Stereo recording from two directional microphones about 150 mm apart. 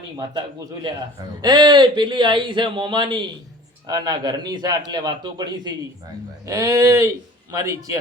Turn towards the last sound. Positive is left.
turn(degrees=-25)  # may be behind; listen again after turning